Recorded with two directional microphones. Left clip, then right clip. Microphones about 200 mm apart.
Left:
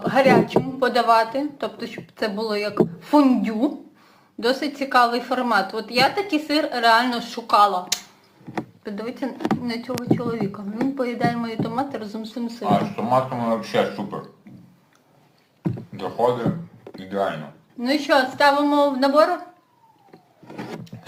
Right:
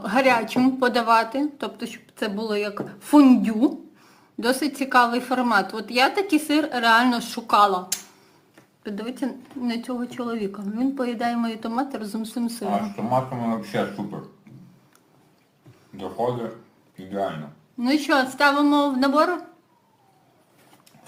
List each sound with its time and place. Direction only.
0.0 s a woman's voice: 50° right (ahead or behind)
8.8 s speech: 35° right (ahead or behind)
13.1 s speech: 20° right (ahead or behind)
16.0 s speech: 15° right (ahead or behind)
17.7 s a woman's voice: 55° right (ahead or behind)